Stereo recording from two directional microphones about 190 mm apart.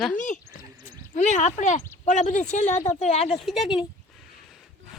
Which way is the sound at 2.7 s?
15° left (ahead or behind).